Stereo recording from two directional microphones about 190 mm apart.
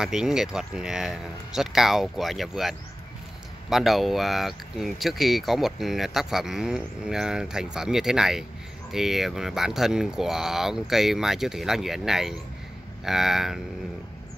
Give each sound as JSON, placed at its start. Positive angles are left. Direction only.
{"t": 0.0, "sound": "speech", "side_deg": -5}
{"t": 3.7, "sound": "speech", "side_deg": 0}